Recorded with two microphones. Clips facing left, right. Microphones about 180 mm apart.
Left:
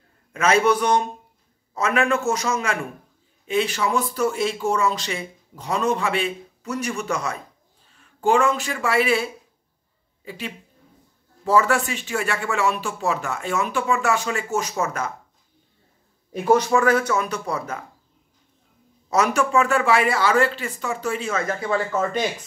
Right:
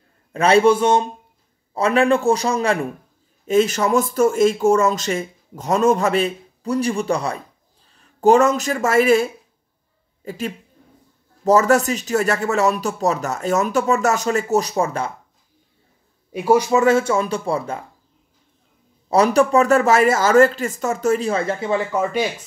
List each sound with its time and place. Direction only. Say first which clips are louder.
0.3 s a woman's voice: right 5 dB; 30° right (ahead or behind)
16.3 s speech: right 2 dB; 10° right (ahead or behind)
16.8 s speech: right 4 dB; 25° right (ahead or behind)
19.0 s speech: right 6 dB; 30° right (ahead or behind); by 22.2 s 15° right (ahead or behind)